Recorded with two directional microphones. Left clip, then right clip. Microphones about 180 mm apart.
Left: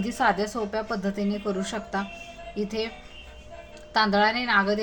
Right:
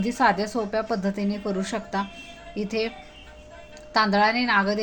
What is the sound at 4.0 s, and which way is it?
Speech, 15° right (ahead or behind).